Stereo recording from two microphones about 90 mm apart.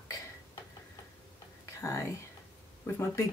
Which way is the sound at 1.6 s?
35° left (ahead or behind).